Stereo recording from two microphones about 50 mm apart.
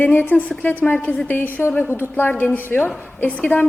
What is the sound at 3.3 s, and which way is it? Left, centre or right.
Speech, left.